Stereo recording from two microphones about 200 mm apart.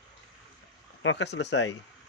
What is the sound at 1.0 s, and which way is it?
Speech, 65° left (ahead or behind).